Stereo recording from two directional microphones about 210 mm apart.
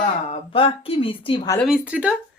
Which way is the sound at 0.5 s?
25° left (ahead or behind).